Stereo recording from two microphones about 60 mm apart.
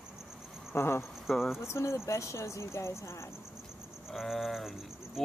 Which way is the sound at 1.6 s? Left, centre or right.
Left.